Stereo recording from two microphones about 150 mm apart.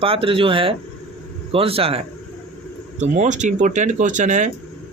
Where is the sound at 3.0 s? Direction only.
50° right (ahead or behind).